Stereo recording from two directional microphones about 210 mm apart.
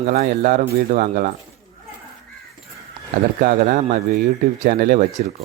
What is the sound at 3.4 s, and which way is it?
Speech, 40° right (ahead or behind).